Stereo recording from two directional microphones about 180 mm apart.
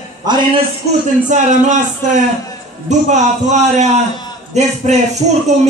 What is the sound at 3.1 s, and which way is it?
Speech, 40° right (ahead or behind).